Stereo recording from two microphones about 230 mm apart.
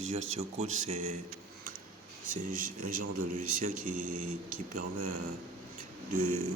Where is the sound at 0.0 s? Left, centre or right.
Right.